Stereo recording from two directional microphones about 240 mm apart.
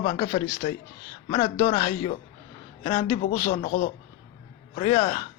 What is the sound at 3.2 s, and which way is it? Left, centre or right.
A man's voice, left.